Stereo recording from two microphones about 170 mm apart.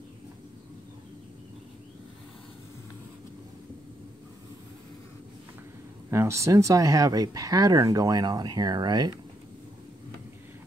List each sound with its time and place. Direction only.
6.0 s speech: 15° right (ahead or behind)